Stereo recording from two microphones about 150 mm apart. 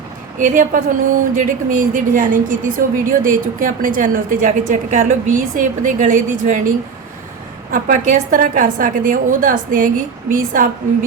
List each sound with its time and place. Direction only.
0.3 s a woman's voice: 60° right (ahead or behind)